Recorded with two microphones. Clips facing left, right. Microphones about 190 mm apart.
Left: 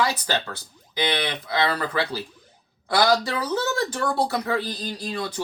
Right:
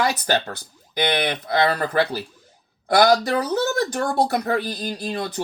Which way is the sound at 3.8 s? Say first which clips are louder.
Right 3 dB; 45° right (ahead or behind).